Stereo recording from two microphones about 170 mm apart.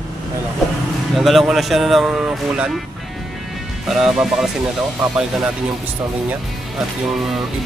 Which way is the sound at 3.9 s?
5° right (ahead or behind).